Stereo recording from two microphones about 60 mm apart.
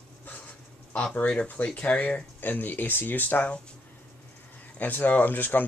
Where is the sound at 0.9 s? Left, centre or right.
Left.